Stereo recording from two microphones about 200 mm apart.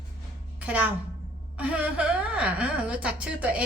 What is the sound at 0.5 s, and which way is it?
Music, 5° right (ahead or behind).